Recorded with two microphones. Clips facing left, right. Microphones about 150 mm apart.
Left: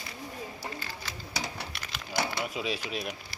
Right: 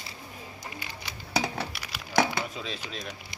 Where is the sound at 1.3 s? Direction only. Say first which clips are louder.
Right 9 dB; 60° right (ahead or behind).